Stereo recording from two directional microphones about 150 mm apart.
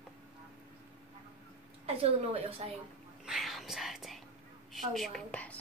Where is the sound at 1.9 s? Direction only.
40° right (ahead or behind).